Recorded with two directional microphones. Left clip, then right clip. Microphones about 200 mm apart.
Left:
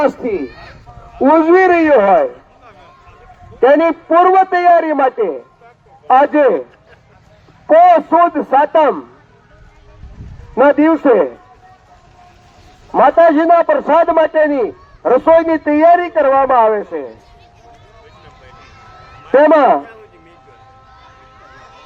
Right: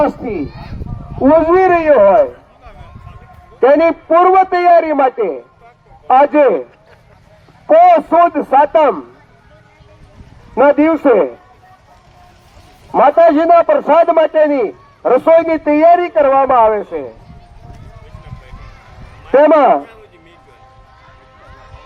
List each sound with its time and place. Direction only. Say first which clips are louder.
1.2 s speech: even; 45° left (ahead or behind)
3.6 s a man's voice: right 1 dB; 30° right (ahead or behind)
7.7 s a man's voice: even; 40° right (ahead or behind)
10.5 s a man's voice: even; 40° right (ahead or behind)
12.9 s a man's voice: even; 40° right (ahead or behind)
19.3 s a man's voice: even; 35° right (ahead or behind)